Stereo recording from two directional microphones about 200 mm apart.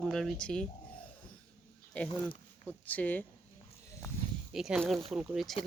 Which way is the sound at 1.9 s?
5° left (ahead or behind).